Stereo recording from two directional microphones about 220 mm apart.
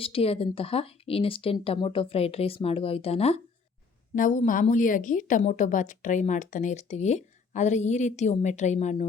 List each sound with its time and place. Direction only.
0.0 s a woman's voice: 25° left (ahead or behind)